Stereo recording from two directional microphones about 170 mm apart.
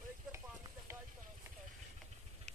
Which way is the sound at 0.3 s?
15° right (ahead or behind).